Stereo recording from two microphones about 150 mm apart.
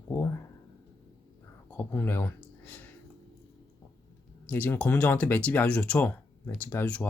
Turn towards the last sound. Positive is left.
turn(degrees=10)  # may be behind; listen again after turning